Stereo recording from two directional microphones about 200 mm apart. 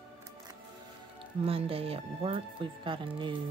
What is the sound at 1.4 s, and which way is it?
Speech, 30° right (ahead or behind).